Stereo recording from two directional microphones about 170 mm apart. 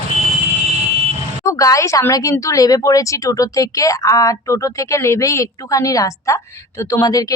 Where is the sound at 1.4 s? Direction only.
20° left (ahead or behind).